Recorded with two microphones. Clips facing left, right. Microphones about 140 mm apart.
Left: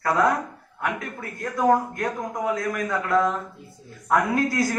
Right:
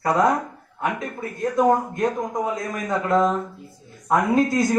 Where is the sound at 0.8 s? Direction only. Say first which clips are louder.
Right 3 dB; 20° right (ahead or behind).